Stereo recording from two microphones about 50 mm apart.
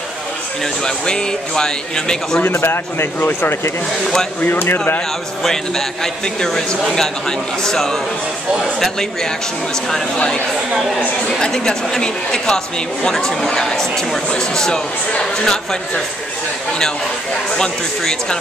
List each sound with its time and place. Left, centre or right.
0.8 s speech: centre
2.6 s speech: left
4.0 s speech: centre
4.4 s speech: left
4.7 s speech: left
5.4 s speech: centre
17.5 s speech: centre